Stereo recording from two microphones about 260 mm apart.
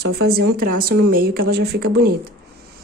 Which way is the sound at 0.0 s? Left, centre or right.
Right.